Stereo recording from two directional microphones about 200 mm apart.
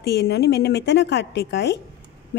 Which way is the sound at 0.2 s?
55° left (ahead or behind).